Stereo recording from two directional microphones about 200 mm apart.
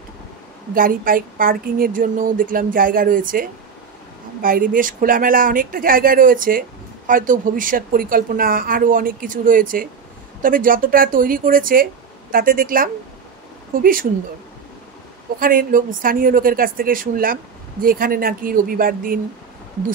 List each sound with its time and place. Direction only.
0.7 s speech: 45° right (ahead or behind)
15.3 s speech: 45° right (ahead or behind)